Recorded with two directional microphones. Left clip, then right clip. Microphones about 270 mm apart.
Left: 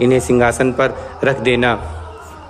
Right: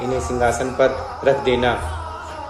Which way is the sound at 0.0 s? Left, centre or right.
Left.